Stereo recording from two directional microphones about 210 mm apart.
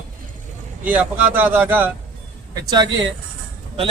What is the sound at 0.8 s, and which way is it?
Speech, 5° right (ahead or behind).